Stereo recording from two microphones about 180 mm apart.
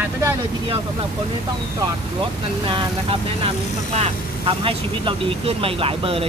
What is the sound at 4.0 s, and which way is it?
Speech, 30° right (ahead or behind).